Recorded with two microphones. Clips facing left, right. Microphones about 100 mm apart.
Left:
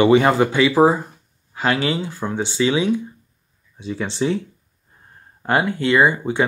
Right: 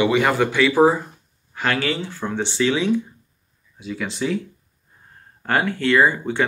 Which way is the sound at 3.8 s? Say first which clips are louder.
Left 3 dB; 30° left (ahead or behind).